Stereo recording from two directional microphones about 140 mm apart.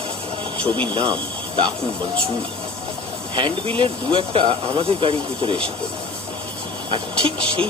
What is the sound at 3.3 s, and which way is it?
Speech, 40° right (ahead or behind).